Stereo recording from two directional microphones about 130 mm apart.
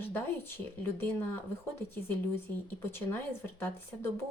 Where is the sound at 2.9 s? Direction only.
15° left (ahead or behind).